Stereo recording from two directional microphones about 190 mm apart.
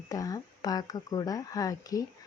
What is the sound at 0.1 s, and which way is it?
Speech, 20° left (ahead or behind).